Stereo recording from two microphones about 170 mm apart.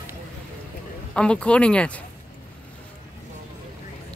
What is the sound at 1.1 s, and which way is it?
Speech, 5° left (ahead or behind).